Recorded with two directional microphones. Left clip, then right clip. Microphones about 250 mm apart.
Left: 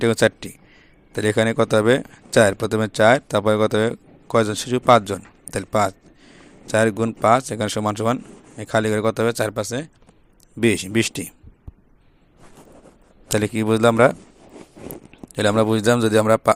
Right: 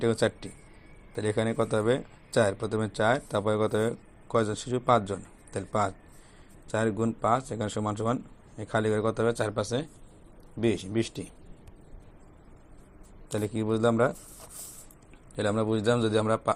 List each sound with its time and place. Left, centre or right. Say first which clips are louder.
0.0 s speech: left 9 dB; left
13.3 s speech: left 9 dB; left